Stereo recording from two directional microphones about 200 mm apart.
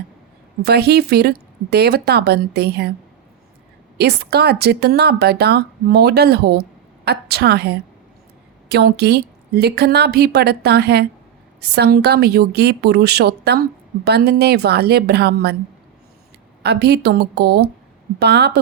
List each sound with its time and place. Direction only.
0.6 s speech: 55° right (ahead or behind)
3.9 s a woman's voice: 55° right (ahead or behind)
16.6 s a woman's voice: 55° right (ahead or behind)